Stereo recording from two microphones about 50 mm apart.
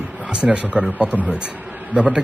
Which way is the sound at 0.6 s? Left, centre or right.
Right.